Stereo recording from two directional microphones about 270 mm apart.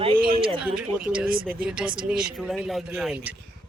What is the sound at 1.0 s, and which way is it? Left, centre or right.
Speech, centre.